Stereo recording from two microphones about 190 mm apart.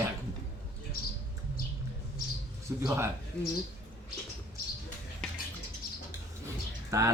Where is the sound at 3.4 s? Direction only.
5° left (ahead or behind).